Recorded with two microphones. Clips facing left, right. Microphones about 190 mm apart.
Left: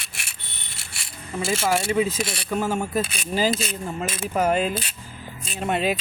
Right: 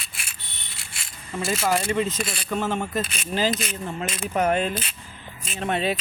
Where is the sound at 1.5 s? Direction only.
10° left (ahead or behind).